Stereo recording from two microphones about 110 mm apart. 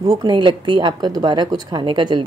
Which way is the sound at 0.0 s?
35° right (ahead or behind).